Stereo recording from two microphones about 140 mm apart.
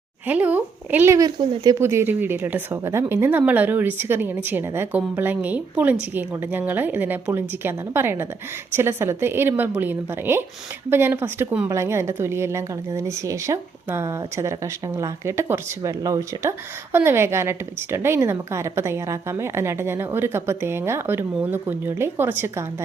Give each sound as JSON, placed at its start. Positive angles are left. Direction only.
{"t": 0.3, "sound": "a woman's voice", "side_deg": -10}